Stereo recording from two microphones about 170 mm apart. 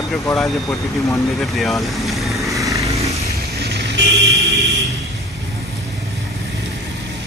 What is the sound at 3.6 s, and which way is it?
Vehicle, 85° right.